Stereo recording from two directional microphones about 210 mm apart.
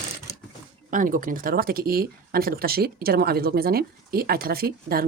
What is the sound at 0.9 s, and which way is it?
Speech, 40° right (ahead or behind).